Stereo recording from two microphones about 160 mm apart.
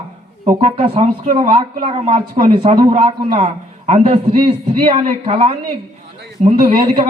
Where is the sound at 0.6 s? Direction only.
40° right (ahead or behind).